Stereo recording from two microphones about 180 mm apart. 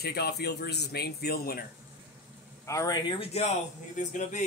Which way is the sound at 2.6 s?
15° left (ahead or behind).